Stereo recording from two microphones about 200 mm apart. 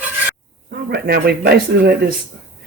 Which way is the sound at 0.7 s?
50° right (ahead or behind).